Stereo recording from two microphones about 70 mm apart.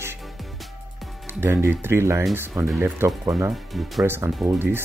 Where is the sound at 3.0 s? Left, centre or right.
Right.